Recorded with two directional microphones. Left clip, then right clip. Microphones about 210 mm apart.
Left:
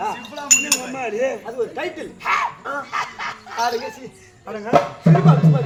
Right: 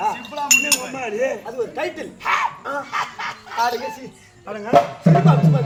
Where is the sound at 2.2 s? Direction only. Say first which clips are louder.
Even; centre (ahead or behind).